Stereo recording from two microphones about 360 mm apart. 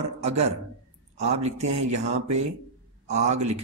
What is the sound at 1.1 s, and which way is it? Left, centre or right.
Speech, centre.